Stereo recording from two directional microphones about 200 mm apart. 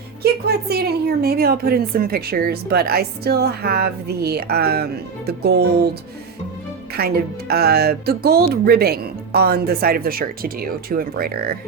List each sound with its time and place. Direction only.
0.2 s a woman's voice: 50° right (ahead or behind)
6.9 s a woman's voice: 50° right (ahead or behind)